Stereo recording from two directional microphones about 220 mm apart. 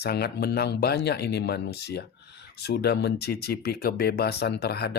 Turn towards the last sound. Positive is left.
turn(degrees=45)  # may be behind; listen again after turning